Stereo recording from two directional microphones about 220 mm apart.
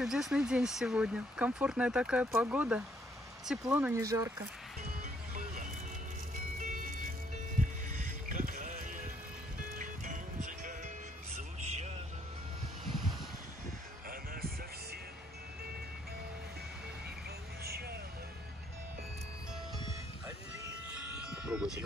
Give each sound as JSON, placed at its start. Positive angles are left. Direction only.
{"t": 0.0, "sound": "speech", "side_deg": 0}
{"t": 6.6, "sound": "music", "side_deg": -35}
{"t": 8.3, "sound": "music", "side_deg": -40}
{"t": 11.6, "sound": "vehicle", "side_deg": -30}
{"t": 17.6, "sound": "music", "side_deg": -45}
{"t": 20.9, "sound": "a sound", "side_deg": -5}